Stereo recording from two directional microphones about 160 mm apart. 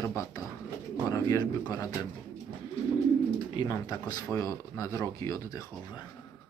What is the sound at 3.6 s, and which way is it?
Speech, 25° left (ahead or behind).